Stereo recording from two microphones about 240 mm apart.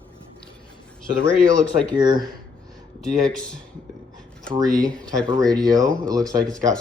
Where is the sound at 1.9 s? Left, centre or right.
Centre.